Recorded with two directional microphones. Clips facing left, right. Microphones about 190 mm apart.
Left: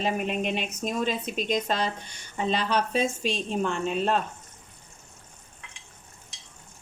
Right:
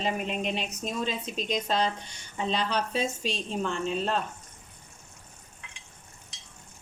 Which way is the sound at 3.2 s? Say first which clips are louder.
Left 3 dB; 55° left (ahead or behind).